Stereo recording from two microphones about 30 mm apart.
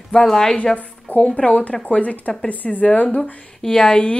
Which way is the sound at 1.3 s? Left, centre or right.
Left.